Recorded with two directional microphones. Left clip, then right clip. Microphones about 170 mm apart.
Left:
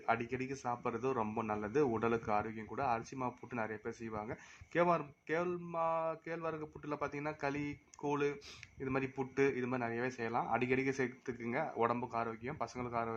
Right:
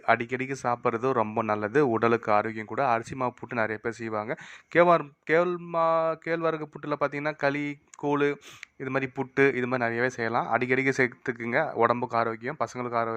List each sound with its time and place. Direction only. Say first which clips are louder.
0.0 s a man's voice: right 11 dB; 30° right (ahead or behind)